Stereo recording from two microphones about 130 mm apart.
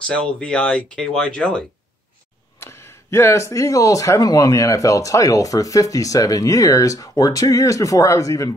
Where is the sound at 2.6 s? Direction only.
20° left (ahead or behind).